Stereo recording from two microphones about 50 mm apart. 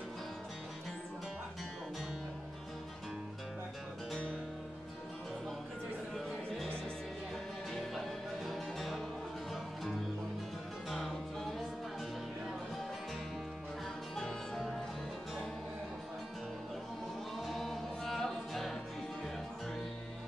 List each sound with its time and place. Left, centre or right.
7.7 s music: centre
10.9 s music: centre
14.1 s music: centre
17.4 s music: centre